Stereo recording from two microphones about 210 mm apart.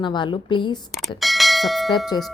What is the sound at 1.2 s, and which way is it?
Speech, centre (ahead or behind).